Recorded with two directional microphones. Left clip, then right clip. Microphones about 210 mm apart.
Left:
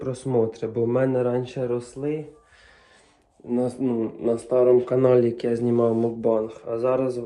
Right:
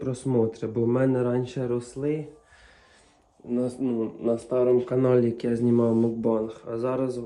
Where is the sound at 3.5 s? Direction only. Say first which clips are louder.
Left 3 dB; 15° left (ahead or behind).